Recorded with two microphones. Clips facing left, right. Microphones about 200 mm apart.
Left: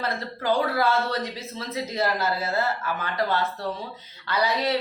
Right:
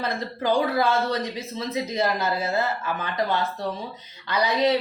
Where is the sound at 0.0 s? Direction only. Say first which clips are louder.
Right 2 dB; 15° right (ahead or behind).